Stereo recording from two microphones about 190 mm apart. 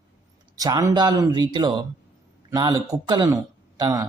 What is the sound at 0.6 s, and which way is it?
Speech, 20° right (ahead or behind).